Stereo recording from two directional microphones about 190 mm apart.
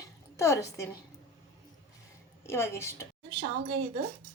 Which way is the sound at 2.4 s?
15° left (ahead or behind).